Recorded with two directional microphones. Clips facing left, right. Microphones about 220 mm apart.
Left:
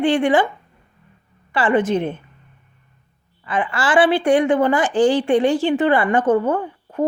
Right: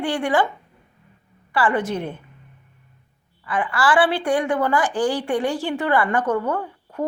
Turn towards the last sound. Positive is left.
turn(degrees=20)  # may be behind; listen again after turning